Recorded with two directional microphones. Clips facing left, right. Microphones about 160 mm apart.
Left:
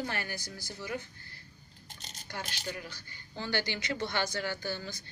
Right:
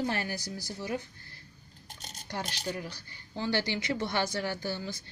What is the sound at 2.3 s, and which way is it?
A woman's voice, 35° right (ahead or behind).